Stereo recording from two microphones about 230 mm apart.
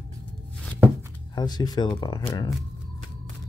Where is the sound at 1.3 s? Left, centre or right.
Centre.